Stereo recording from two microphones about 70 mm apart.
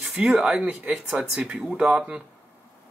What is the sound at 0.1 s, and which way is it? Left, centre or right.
Speech, centre.